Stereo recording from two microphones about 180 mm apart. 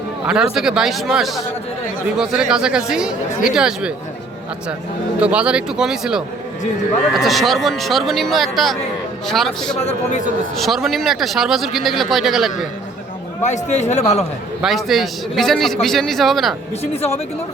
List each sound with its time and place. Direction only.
0.3 s speech: 5° right (ahead or behind)
5.2 s speech: 5° right (ahead or behind)
9.8 s a man's voice: 40° left (ahead or behind)
10.6 s speech: centre (ahead or behind)
13.4 s a man's voice: 40° left (ahead or behind)
14.6 s speech: centre (ahead or behind)
16.8 s a man's voice: 35° left (ahead or behind)